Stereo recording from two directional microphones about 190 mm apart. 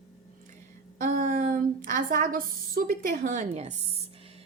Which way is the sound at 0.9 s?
40° right (ahead or behind).